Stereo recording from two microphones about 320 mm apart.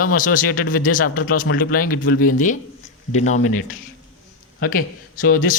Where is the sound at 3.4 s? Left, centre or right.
Left.